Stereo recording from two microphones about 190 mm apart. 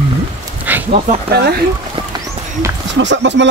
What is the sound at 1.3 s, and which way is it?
Speech, 55° right (ahead or behind).